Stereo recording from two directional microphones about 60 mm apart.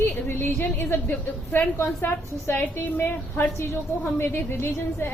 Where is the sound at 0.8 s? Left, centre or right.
Left.